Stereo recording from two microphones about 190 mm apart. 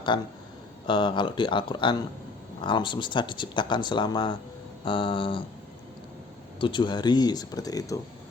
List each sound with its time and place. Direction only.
0.1 s speech: 25° left (ahead or behind)
6.6 s speech: 25° left (ahead or behind)